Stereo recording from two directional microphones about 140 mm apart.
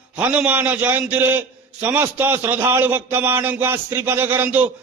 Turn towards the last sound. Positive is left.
turn(degrees=-15)  # may be behind; listen again after turning